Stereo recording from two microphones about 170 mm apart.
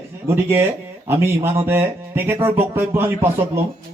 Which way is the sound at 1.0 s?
15° right (ahead or behind).